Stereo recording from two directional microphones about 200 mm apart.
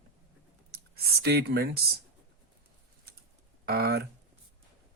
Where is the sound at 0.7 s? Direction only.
50° right (ahead or behind).